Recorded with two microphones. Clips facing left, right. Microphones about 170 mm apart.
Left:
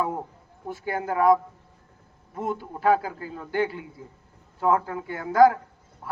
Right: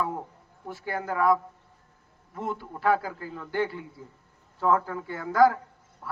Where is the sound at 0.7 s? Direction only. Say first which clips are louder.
Left 3 dB; 20° left (ahead or behind).